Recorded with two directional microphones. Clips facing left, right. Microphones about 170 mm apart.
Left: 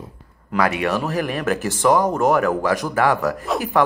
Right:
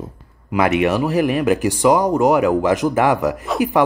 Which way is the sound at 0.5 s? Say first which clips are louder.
Right 4 dB; 20° right (ahead or behind).